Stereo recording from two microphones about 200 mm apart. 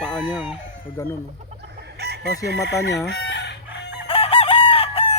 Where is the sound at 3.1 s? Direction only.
60° left (ahead or behind).